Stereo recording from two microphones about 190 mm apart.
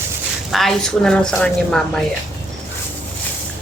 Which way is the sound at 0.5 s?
Centre (ahead or behind).